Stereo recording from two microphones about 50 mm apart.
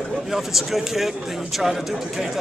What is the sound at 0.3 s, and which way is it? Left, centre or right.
Speech, centre.